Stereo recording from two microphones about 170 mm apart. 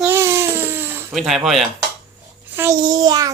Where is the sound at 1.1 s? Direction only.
Centre (ahead or behind).